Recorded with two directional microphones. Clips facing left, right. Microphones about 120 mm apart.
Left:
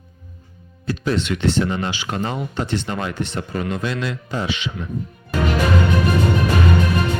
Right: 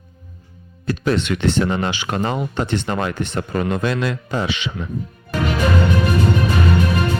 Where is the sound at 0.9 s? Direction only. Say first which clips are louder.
Right 2 dB; 60° right (ahead or behind).